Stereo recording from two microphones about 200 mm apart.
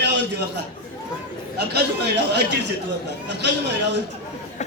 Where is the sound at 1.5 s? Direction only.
55° right (ahead or behind).